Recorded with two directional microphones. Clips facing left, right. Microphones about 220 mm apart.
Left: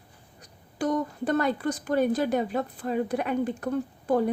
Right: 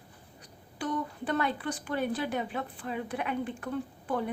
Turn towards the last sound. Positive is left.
turn(degrees=40)  # may be behind; listen again after turning